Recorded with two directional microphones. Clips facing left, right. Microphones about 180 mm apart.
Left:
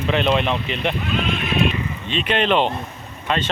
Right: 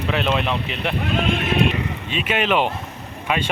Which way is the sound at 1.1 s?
50° right (ahead or behind).